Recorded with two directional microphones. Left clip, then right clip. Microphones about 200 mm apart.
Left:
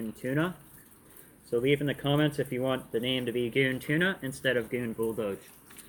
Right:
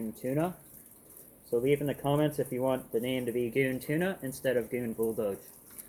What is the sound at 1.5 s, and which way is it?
Speech, 15° left (ahead or behind).